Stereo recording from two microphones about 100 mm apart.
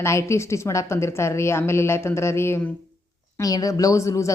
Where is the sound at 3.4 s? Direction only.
35° left (ahead or behind).